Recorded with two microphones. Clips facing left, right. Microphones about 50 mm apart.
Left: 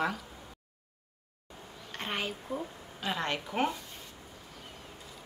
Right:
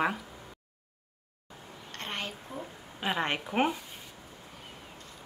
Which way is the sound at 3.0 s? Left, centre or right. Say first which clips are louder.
Right 3 dB; right.